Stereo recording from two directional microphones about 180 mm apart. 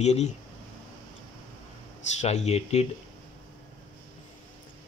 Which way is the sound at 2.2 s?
35° left (ahead or behind).